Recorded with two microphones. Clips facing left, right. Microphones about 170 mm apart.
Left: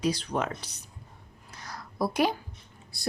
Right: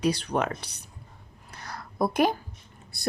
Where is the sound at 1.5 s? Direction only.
60° right (ahead or behind).